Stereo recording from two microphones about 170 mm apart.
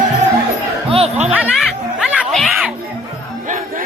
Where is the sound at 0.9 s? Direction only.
35° right (ahead or behind).